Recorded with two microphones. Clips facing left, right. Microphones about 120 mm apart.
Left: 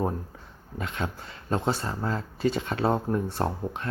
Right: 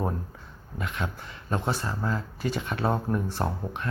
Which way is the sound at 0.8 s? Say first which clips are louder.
Left 1 dB; 30° left (ahead or behind).